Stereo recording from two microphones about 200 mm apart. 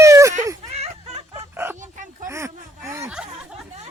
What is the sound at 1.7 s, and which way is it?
Dog, 40° right (ahead or behind).